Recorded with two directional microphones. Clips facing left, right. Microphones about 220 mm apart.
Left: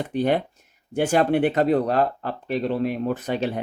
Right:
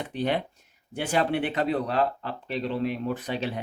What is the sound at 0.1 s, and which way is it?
Speech, 45° left (ahead or behind).